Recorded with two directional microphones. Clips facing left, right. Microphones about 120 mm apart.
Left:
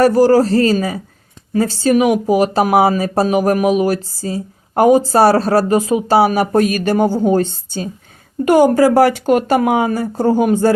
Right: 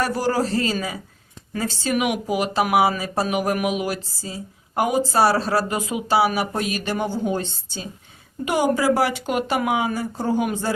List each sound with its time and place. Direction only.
0.0 s a man's voice: 40° left (ahead or behind)